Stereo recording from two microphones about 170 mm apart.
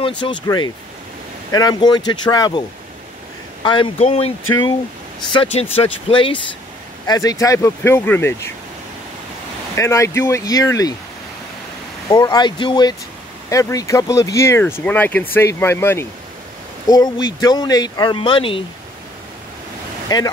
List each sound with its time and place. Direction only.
0.2 s speech: 25° left (ahead or behind)
3.6 s speech: 30° left (ahead or behind)
5.3 s speech: 35° left (ahead or behind)
7.1 s speech: 20° left (ahead or behind)
9.8 s speech: 15° left (ahead or behind)
12.1 s speech: 25° left (ahead or behind)
16.8 s speech: 25° left (ahead or behind)
20.1 s speech: 25° left (ahead or behind)